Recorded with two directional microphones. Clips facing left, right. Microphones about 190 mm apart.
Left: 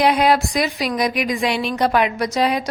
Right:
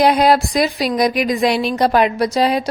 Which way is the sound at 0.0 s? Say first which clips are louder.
Right 3 dB; 40° right (ahead or behind).